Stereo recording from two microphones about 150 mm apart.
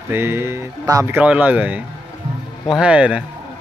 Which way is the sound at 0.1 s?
15° right (ahead or behind).